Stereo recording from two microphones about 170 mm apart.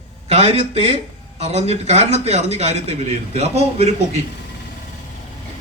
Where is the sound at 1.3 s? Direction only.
40° right (ahead or behind).